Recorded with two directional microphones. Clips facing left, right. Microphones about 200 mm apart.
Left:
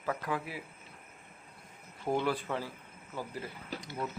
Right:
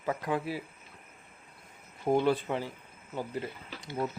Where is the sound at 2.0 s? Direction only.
25° right (ahead or behind).